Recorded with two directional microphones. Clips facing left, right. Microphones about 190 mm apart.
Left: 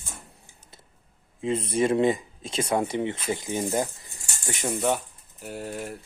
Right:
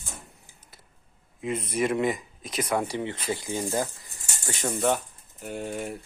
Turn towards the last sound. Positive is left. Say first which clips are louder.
# right 1 dB
turn(degrees=0)  # may be behind; listen again after turning